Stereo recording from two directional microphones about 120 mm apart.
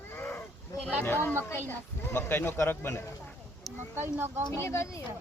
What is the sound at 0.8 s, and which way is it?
A woman's voice, 15° left (ahead or behind).